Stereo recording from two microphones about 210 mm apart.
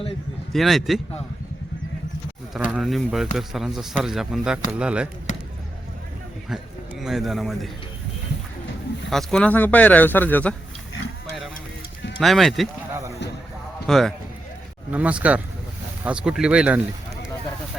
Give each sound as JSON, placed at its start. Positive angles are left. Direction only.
{"t": 0.5, "sound": "speech", "side_deg": 0}
{"t": 2.6, "sound": "speech", "side_deg": 0}
{"t": 7.0, "sound": "speech", "side_deg": 0}
{"t": 9.0, "sound": "speech", "side_deg": 0}
{"t": 12.2, "sound": "speech", "side_deg": 0}
{"t": 12.9, "sound": "a sound", "side_deg": -15}
{"t": 13.8, "sound": "a man's voice", "side_deg": 0}